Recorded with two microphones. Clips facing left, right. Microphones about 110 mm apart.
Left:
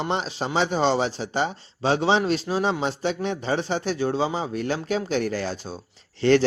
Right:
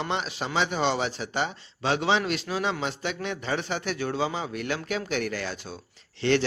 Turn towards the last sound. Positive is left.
turn(degrees=40)  # may be behind; listen again after turning